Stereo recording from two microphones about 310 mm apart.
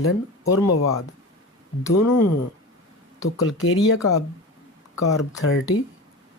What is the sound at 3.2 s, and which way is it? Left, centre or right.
Speech, left.